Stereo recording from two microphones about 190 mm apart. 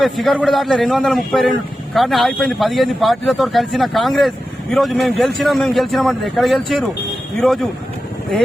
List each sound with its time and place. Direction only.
0.0 s a man's voice: centre (ahead or behind)